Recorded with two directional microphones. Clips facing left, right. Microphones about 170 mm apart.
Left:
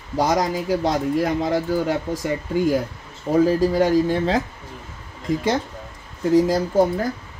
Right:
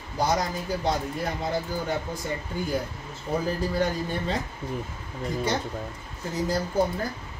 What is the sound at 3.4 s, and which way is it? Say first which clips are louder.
Speech: left 8 dB; 90° left.